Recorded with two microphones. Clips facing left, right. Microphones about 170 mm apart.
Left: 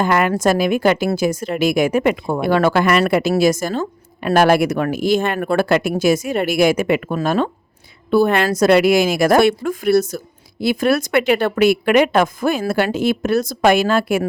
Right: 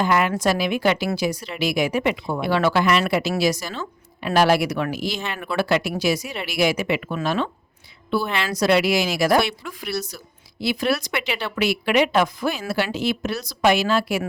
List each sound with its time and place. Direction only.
0.0 s a woman's voice: 50° left (ahead or behind)